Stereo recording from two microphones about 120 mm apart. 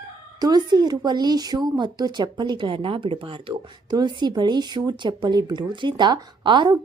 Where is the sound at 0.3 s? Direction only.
35° right (ahead or behind).